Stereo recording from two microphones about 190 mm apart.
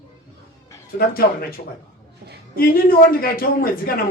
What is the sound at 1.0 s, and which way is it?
Speech, 50° left (ahead or behind).